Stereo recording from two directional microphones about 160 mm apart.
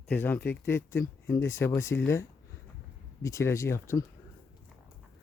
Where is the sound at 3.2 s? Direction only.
20° left (ahead or behind).